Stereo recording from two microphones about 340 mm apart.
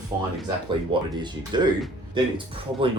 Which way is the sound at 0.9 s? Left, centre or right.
Centre.